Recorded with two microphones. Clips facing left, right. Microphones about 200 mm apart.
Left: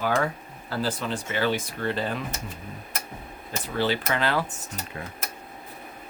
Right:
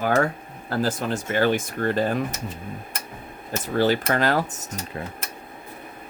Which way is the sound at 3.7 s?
45° right (ahead or behind).